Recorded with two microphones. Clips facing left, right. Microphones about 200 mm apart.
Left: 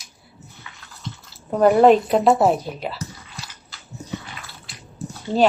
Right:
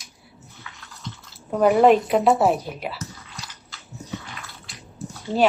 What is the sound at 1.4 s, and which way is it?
Drip, 5° right (ahead or behind).